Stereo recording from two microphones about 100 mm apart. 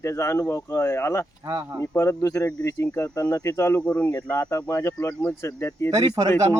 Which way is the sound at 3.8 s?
15° left (ahead or behind).